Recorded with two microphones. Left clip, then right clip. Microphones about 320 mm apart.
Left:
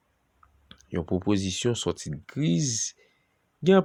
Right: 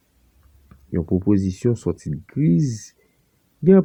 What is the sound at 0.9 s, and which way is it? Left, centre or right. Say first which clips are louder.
Speech: right 6 dB; left.